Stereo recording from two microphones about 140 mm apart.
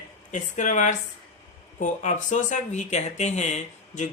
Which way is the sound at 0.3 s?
65° left (ahead or behind).